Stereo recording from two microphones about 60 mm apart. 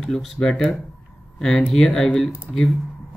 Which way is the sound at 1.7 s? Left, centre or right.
Centre.